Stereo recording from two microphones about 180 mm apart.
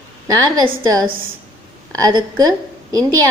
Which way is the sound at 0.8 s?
20° right (ahead or behind).